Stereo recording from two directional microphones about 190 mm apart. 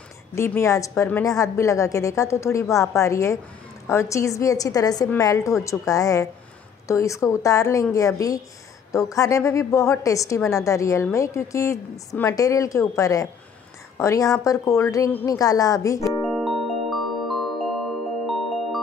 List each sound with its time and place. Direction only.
0.3 s a woman's voice: 15° left (ahead or behind)
16.3 s glockenspiel: centre (ahead or behind)
18.2 s music: centre (ahead or behind)